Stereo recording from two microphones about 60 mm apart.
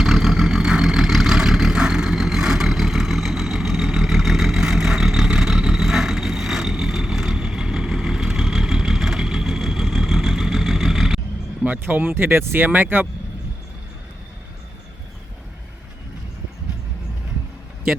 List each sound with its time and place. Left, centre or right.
0.0 s vehicle: centre
11.6 s speech: right